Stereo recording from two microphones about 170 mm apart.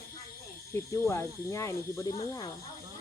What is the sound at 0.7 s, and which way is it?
Speech, 15° left (ahead or behind).